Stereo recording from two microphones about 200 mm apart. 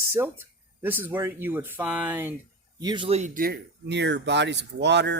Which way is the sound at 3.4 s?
50° right (ahead or behind).